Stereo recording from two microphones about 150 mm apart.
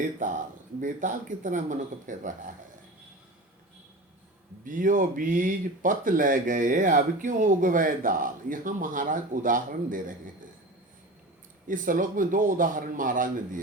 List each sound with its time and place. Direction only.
0.2 s speech: 60° right (ahead or behind)
4.6 s speech: 65° right (ahead or behind)
11.7 s speech: 60° right (ahead or behind)